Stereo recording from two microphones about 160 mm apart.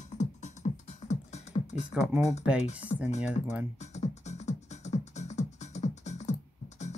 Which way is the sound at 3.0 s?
45° left (ahead or behind).